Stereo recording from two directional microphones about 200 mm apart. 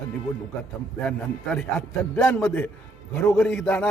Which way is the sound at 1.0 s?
5° left (ahead or behind).